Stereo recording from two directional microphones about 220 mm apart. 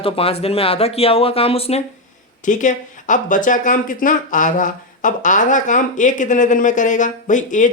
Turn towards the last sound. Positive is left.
turn(degrees=35)  # may be behind; listen again after turning